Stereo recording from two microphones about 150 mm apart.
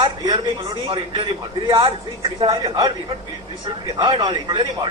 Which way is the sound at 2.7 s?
30° right (ahead or behind).